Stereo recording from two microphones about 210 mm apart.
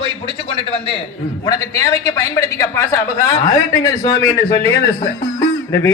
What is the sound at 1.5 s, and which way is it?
A man's voice, 15° left (ahead or behind).